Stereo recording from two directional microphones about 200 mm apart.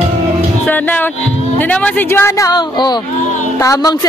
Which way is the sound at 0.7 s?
10° left (ahead or behind).